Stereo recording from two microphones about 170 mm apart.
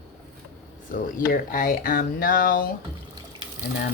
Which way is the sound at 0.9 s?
55° left (ahead or behind).